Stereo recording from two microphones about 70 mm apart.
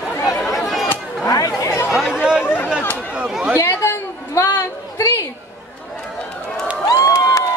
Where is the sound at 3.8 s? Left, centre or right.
Left.